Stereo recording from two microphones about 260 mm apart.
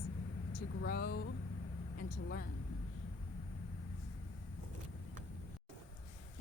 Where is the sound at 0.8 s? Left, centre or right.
Left.